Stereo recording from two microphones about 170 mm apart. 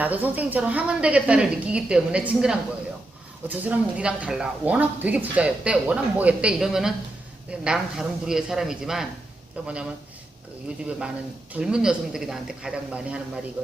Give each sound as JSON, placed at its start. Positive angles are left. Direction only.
{"t": 0.0, "sound": "speech", "side_deg": -10}